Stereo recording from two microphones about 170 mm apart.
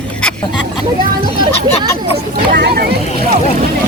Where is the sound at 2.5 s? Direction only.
65° right (ahead or behind).